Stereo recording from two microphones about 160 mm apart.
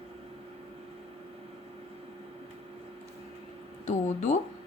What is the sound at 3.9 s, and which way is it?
Speech, 45° left (ahead or behind).